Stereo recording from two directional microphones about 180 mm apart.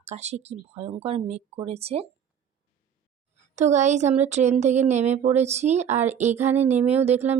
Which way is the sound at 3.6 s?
40° right (ahead or behind).